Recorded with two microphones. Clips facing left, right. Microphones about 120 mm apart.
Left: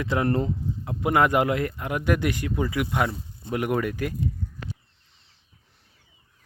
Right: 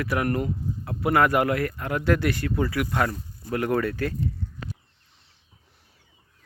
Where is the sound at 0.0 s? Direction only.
25° left (ahead or behind).